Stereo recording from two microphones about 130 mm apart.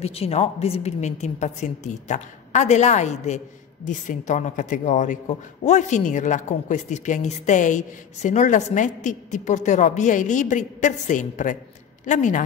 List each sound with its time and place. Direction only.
0.0 s a woman's voice: 50° left (ahead or behind)
3.8 s speech: 75° left (ahead or behind)